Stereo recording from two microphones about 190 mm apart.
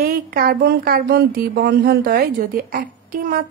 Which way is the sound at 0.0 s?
50° right (ahead or behind).